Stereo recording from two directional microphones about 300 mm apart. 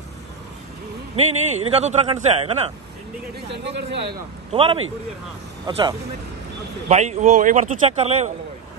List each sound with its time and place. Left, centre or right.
1.1 s speech: right
3.4 s a sound: right
4.5 s speech: centre